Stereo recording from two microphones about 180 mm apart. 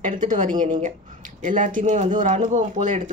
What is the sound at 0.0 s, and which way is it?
Speech, 45° right (ahead or behind).